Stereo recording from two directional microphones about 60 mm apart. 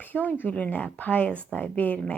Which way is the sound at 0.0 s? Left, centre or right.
Left.